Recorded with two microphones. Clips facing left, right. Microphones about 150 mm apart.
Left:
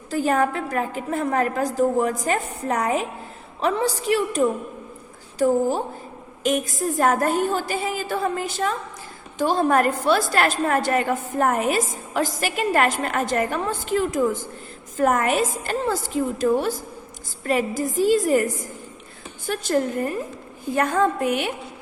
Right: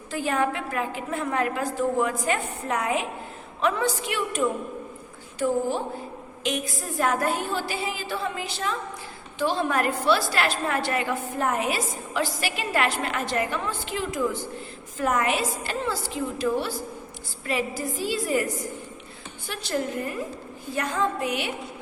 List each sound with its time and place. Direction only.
0.1 s a woman's voice: 40° left (ahead or behind)